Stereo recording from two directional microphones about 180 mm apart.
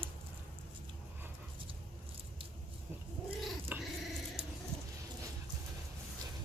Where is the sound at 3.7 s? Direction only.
10° right (ahead or behind).